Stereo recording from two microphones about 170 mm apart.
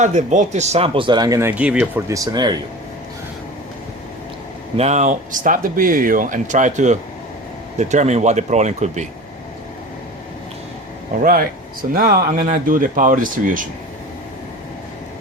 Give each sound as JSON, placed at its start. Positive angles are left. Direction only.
{"t": 0.0, "sound": "speech", "side_deg": -45}
{"t": 2.0, "sound": "speech", "side_deg": -20}
{"t": 4.8, "sound": "speech", "side_deg": -45}
{"t": 11.2, "sound": "speech", "side_deg": -60}